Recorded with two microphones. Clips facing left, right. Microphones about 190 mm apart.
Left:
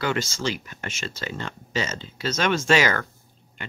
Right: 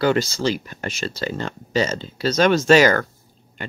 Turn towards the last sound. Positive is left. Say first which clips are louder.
# right 7 dB
turn(degrees=-40)  # may be behind; listen again after turning